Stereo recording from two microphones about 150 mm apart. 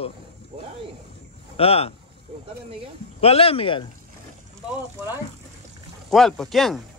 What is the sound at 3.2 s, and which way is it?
Speech, 40° left (ahead or behind).